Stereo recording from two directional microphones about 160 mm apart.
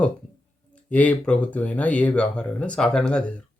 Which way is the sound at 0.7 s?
10° left (ahead or behind).